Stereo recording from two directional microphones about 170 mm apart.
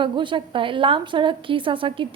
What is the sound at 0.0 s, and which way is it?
A woman's voice, 30° right (ahead or behind).